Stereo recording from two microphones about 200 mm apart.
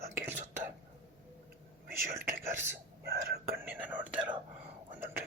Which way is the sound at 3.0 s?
55° right (ahead or behind).